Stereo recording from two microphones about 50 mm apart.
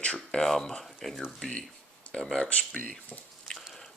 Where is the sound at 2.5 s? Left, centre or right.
Left.